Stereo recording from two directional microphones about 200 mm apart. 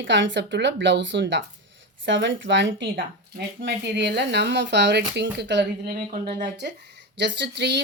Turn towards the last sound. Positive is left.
turn(degrees=-60)  # may be behind; listen again after turning